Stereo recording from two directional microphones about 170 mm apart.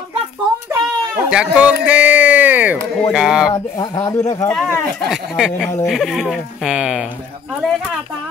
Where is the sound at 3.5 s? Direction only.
20° left (ahead or behind).